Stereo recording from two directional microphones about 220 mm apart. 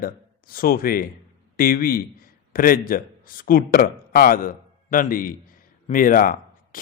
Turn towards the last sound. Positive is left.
turn(degrees=40)  # may be behind; listen again after turning